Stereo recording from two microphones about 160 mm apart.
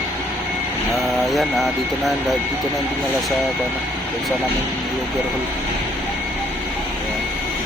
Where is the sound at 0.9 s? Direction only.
Centre (ahead or behind).